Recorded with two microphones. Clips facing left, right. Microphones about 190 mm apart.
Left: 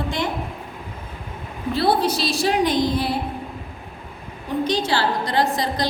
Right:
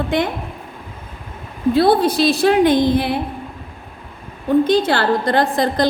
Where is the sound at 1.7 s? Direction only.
50° right (ahead or behind).